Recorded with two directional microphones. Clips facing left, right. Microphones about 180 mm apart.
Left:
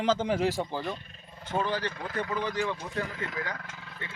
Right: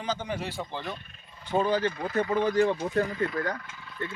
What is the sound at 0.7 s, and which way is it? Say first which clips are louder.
Speech: left 2 dB; 5° left (ahead or behind).